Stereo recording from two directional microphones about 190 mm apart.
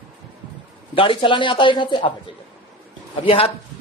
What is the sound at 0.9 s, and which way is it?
Speech, 30° left (ahead or behind).